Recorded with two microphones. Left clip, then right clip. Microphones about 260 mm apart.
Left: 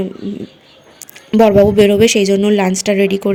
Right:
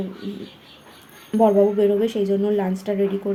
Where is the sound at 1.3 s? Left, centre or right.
Left.